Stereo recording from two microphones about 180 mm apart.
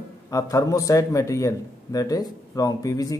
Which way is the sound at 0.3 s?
20° left (ahead or behind).